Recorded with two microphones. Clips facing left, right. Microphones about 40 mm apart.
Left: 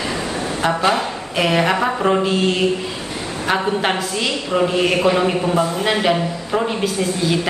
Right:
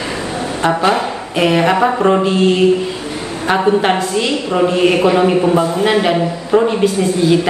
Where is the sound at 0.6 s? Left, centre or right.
Centre.